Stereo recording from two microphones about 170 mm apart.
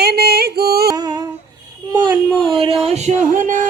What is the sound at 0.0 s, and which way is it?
Music, 65° right (ahead or behind).